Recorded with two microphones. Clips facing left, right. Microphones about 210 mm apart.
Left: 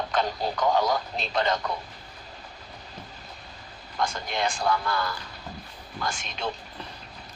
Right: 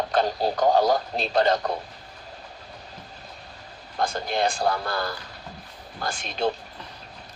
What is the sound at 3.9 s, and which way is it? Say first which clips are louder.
Speech: right 3 dB; 35° right (ahead or behind).